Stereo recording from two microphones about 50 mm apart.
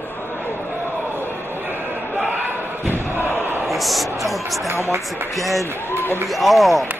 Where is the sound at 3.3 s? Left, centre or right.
Right.